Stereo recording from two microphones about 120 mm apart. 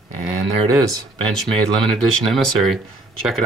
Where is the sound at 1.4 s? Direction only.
5° left (ahead or behind).